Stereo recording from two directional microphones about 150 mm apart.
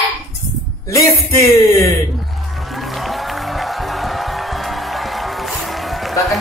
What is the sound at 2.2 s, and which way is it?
Music, centre (ahead or behind).